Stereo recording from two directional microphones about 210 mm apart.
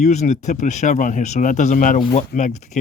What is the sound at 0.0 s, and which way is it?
Speech, 35° left (ahead or behind).